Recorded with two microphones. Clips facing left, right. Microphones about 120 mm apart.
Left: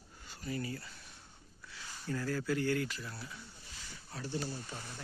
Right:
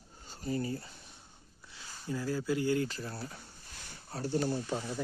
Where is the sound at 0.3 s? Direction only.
30° right (ahead or behind).